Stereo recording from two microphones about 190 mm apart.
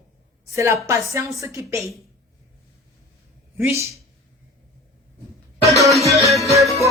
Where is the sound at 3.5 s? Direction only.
15° right (ahead or behind).